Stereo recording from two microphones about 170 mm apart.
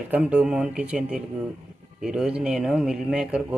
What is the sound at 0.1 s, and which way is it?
Speech, 5° right (ahead or behind).